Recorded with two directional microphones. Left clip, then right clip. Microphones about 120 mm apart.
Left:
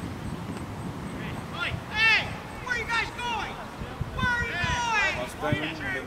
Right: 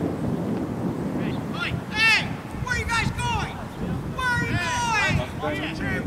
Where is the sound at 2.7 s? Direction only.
35° right (ahead or behind).